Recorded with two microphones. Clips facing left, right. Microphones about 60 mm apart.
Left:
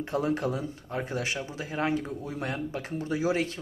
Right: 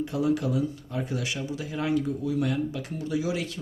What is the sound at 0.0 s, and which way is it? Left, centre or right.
Speech, left.